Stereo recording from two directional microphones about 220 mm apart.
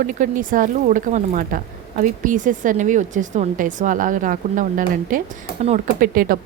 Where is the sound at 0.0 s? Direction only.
35° right (ahead or behind).